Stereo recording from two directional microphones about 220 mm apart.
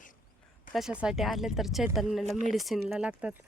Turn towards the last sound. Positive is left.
turn(degrees=-5)  # may be behind; listen again after turning